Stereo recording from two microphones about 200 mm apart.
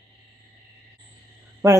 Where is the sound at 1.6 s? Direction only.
15° right (ahead or behind).